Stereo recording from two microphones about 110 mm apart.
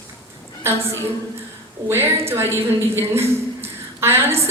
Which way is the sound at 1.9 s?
20° right (ahead or behind).